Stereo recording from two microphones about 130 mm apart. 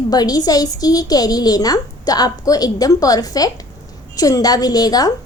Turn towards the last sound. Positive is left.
turn(degrees=30)  # may be behind; listen again after turning